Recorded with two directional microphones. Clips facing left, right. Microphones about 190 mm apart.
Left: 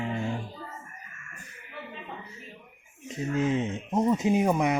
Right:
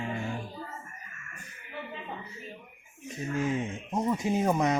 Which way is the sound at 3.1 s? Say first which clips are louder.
Left 3 dB; 20° left (ahead or behind).